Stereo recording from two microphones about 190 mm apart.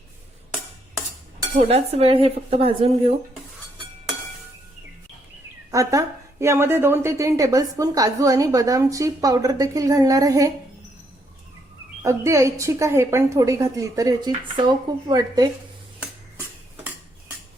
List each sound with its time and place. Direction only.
1.5 s dishes: 30° right (ahead or behind)
5.7 s a woman's voice: 15° right (ahead or behind)
12.0 s a woman's voice: 15° right (ahead or behind)